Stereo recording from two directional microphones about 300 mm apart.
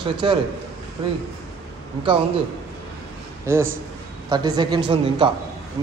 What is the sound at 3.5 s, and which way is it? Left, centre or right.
A man's voice, centre.